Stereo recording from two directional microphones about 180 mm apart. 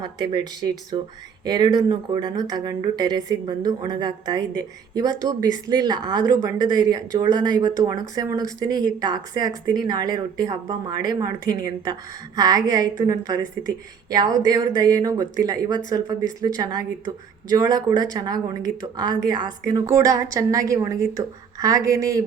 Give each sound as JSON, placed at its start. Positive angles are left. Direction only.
{"t": 0.0, "sound": "speech", "side_deg": -25}
{"t": 12.4, "sound": "speech", "side_deg": -20}